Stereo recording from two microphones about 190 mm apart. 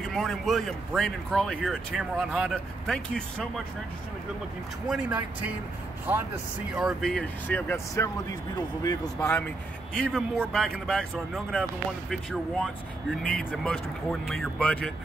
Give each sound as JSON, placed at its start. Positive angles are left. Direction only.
{"t": 0.1, "sound": "speech", "side_deg": 0}
{"t": 4.8, "sound": "speech", "side_deg": -5}
{"t": 9.9, "sound": "speech", "side_deg": 5}
{"t": 14.2, "sound": "speech", "side_deg": 0}